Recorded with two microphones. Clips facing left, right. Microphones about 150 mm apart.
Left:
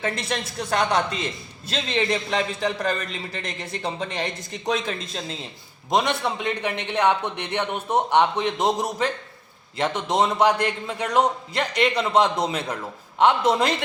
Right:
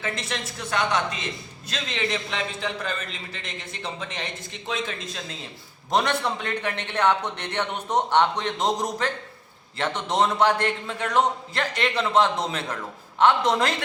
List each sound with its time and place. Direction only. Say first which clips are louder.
0.0 s a man's voice: left 4 dB; 35° left (ahead or behind)
5.9 s a man's voice: left 1 dB; 15° left (ahead or behind)